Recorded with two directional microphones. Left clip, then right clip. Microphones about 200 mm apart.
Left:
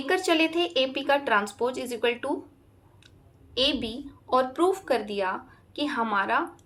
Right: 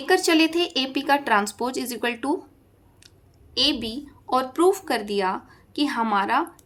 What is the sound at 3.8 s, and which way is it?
A woman's voice, 60° right (ahead or behind).